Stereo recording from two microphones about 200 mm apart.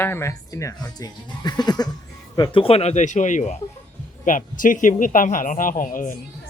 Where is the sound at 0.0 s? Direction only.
10° left (ahead or behind); by 6.1 s 45° left (ahead or behind).